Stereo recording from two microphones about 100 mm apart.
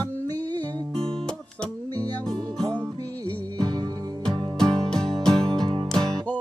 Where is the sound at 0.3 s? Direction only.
40° right (ahead or behind).